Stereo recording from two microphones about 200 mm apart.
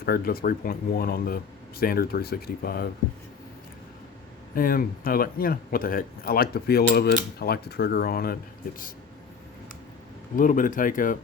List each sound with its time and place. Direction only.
0.0 s speech: 50° left (ahead or behind)
4.5 s speech: 45° left (ahead or behind)
10.3 s speech: 40° left (ahead or behind)